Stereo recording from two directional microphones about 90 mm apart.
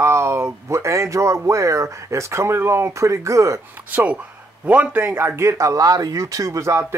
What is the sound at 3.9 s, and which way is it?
Speech, 15° right (ahead or behind).